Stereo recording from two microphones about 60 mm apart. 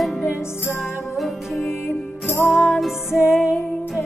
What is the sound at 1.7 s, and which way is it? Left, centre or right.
Music, left.